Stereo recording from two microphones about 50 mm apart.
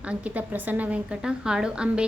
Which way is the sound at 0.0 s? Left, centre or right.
Right.